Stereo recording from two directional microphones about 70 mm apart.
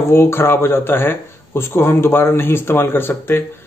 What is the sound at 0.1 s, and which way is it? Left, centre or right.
Speech, left.